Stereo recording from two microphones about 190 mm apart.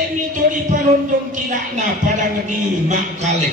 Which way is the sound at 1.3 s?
40° right (ahead or behind).